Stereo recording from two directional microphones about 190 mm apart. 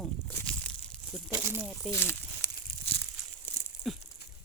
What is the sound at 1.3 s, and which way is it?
Speech, 15° right (ahead or behind).